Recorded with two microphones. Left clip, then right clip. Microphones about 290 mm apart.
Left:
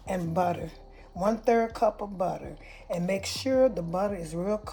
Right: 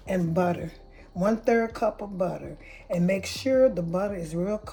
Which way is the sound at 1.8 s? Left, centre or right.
Left.